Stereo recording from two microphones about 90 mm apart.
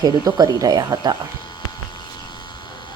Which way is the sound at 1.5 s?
55° left (ahead or behind).